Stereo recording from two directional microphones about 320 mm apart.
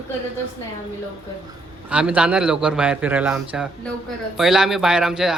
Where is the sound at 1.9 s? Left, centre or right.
Centre.